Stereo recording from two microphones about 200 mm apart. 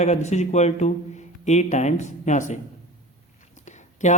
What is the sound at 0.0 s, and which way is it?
Speech, 35° left (ahead or behind).